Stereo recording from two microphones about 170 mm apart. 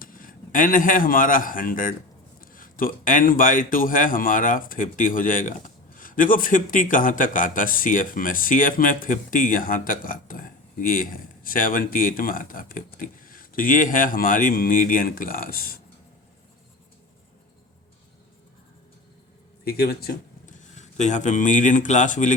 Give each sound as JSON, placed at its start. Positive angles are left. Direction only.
{"t": 0.0, "sound": "a man's voice", "side_deg": 55}
{"t": 19.6, "sound": "speech", "side_deg": 65}
{"t": 20.5, "sound": "speech", "side_deg": 45}